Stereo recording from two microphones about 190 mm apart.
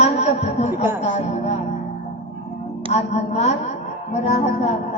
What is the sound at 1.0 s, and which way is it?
Music, 40° left (ahead or behind).